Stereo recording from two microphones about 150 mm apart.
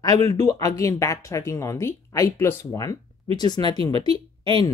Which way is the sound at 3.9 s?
40° right (ahead or behind).